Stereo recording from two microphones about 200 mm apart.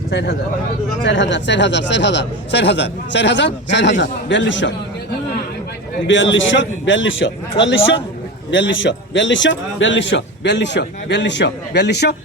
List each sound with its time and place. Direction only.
0.1 s speech: 60° left (ahead or behind)
6.1 s a man's voice: 65° left (ahead or behind)